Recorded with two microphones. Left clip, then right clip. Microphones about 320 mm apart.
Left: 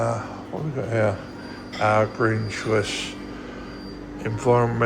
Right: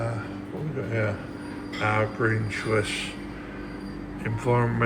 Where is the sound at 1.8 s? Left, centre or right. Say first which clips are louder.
Left 5 dB; centre.